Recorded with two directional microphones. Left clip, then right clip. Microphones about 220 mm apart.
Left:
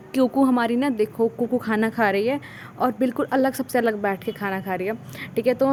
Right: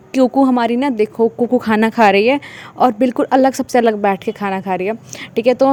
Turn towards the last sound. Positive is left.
turn(degrees=-35)  # may be behind; listen again after turning